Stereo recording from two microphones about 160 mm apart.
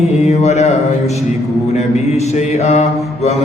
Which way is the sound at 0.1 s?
45° left (ahead or behind).